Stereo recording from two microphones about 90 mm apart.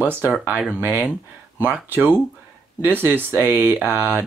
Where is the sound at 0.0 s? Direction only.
20° right (ahead or behind).